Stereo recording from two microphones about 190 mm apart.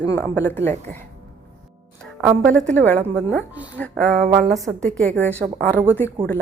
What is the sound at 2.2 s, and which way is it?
A woman's voice, centre (ahead or behind).